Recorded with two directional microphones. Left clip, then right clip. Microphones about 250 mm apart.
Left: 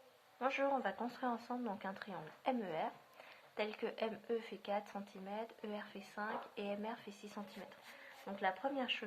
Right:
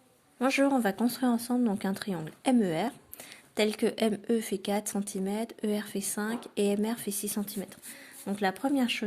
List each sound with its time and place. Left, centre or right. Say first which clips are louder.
0.3 s speech: right 10 dB; right